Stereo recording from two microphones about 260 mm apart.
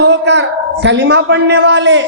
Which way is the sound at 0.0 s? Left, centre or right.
Right.